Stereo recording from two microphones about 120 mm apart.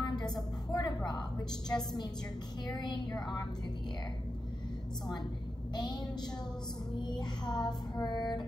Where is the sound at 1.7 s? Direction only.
35° left (ahead or behind).